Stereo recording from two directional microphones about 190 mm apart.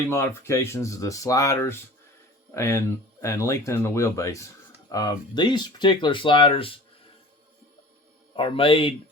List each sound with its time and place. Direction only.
0.1 s speech: 15° left (ahead or behind)
8.4 s speech: 30° left (ahead or behind)